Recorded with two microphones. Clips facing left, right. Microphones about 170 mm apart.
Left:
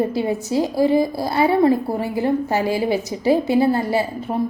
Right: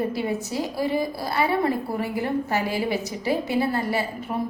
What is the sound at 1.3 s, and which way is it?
A woman's voice, 25° left (ahead or behind).